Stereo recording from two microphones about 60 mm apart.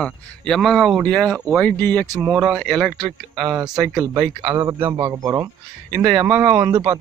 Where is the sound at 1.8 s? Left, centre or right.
Left.